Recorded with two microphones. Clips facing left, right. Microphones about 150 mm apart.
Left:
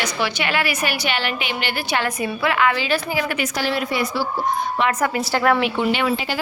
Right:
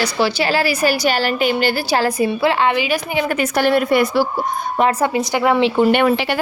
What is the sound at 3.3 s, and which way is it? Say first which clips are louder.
Speech: right 7 dB; 50° right (ahead or behind).